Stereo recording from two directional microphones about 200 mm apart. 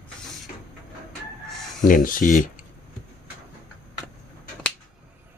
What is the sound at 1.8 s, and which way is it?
Speech, 45° left (ahead or behind).